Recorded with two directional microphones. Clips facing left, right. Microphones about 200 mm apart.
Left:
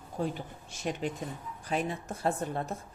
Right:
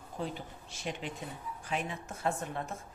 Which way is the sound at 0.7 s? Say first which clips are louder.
Left 6 dB; 45° left (ahead or behind).